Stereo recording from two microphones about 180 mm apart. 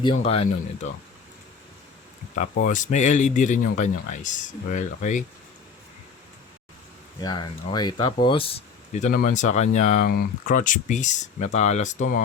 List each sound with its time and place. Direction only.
0.0 s speech: 35° left (ahead or behind)
2.3 s speech: 45° left (ahead or behind)
7.2 s speech: 25° left (ahead or behind); by 10.1 s 40° left (ahead or behind)
10.1 s speech: 50° left (ahead or behind)